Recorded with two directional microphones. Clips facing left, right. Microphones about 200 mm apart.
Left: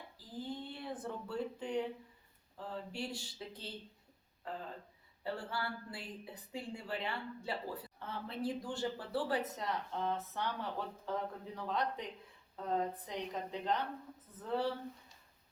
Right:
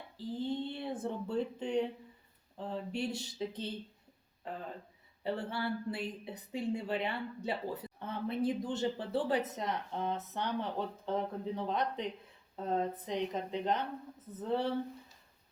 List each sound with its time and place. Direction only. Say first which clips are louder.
0.2 s a woman's voice: right 8 dB; 25° right (ahead or behind)
5.2 s a woman's voice: right 5 dB; 20° right (ahead or behind)